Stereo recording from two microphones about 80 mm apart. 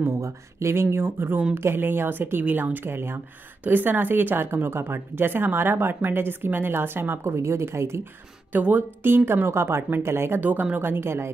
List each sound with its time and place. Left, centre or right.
0.2 s a woman's voice: right
8.5 s a woman's voice: right